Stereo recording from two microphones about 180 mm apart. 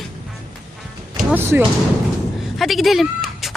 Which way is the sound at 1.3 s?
10° right (ahead or behind).